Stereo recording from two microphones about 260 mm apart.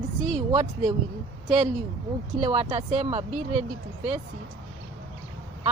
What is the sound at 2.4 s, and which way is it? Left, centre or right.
Speech, right.